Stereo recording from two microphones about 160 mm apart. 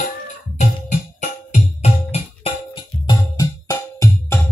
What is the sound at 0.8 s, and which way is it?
Music, 50° left (ahead or behind).